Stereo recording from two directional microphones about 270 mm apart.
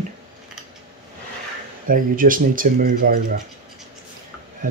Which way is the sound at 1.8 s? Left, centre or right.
Right.